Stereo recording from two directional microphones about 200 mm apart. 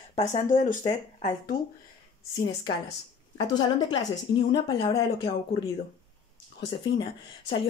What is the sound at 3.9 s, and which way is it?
Speech, 65° left (ahead or behind).